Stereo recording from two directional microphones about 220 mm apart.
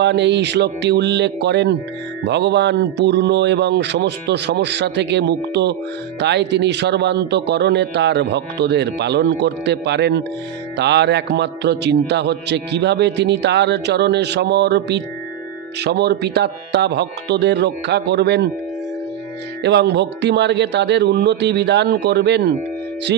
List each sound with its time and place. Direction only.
0.0 s a man's voice: 50° right (ahead or behind)
19.6 s a man's voice: 50° right (ahead or behind)